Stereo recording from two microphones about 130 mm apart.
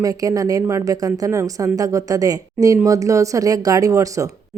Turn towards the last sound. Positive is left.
turn(degrees=-25)  # may be behind; listen again after turning